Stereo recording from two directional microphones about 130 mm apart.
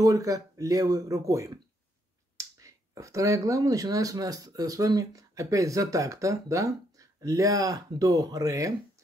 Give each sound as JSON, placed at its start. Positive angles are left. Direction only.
{"t": 0.0, "sound": "speech", "side_deg": -25}